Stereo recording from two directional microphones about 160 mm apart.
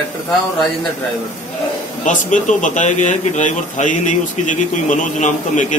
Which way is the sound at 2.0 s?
50° left (ahead or behind).